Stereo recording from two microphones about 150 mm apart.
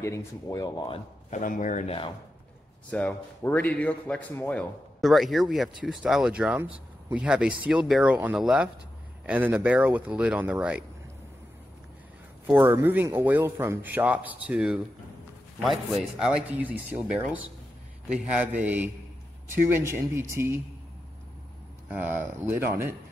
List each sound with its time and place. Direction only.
0.0 s speech: 20° left (ahead or behind)
1.3 s speech: 60° left (ahead or behind)
1.9 s speech: 35° left (ahead or behind)
2.9 s a man's voice: 10° left (ahead or behind); by 10.8 s 10° right (ahead or behind)
12.5 s speech: 15° right (ahead or behind)
21.8 s speech: 15° right (ahead or behind)